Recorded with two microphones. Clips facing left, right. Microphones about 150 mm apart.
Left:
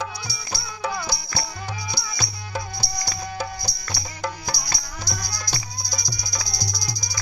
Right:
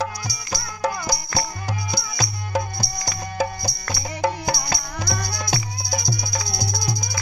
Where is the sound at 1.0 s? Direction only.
45° right (ahead or behind).